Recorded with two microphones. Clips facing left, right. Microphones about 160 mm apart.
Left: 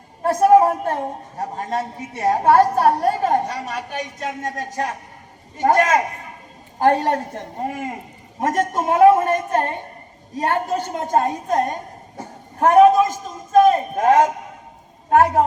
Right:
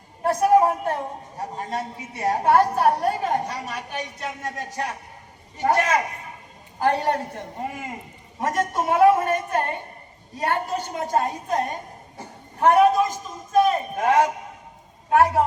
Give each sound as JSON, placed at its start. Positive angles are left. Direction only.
{"t": 0.3, "sound": "a woman's voice", "side_deg": 50}
{"t": 13.6, "sound": "a sound", "side_deg": 45}
{"t": 15.1, "sound": "a woman's voice", "side_deg": 50}